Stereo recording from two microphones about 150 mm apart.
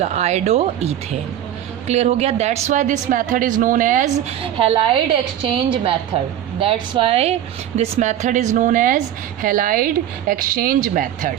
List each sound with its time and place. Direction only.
0.0 s speech: 45° right (ahead or behind); by 4.1 s 60° right (ahead or behind)
4.5 s a woman's voice: 40° right (ahead or behind); by 11.3 s 60° right (ahead or behind)